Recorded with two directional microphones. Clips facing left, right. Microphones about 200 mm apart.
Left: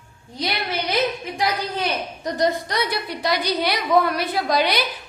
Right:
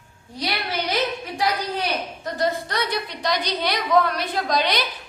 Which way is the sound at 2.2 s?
15° left (ahead or behind).